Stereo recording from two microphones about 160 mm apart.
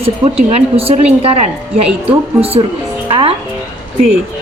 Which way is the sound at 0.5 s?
40° right (ahead or behind).